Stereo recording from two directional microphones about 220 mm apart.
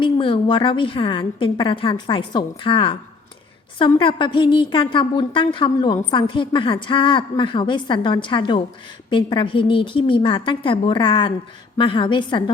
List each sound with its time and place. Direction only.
0.0 s a woman's voice: 25° left (ahead or behind)